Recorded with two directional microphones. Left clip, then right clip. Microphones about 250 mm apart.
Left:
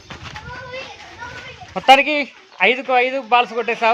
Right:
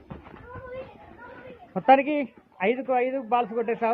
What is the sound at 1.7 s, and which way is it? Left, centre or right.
Speech, centre.